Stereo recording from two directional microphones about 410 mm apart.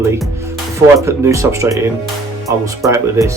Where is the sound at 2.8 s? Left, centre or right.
Centre.